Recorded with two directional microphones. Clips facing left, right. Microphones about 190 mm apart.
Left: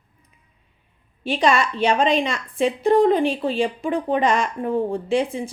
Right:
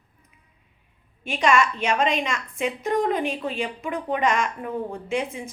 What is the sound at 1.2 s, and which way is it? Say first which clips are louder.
A woman's voice: left 2 dB; 35° left (ahead or behind).